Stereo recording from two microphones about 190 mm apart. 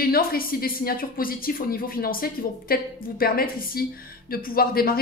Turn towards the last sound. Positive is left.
turn(degrees=50)  # may be behind; listen again after turning